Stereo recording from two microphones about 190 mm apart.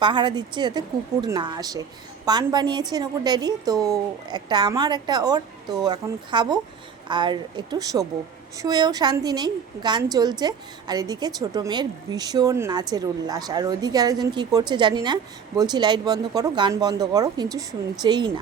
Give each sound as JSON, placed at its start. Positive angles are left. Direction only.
{"t": 0.0, "sound": "a woman's voice", "side_deg": -25}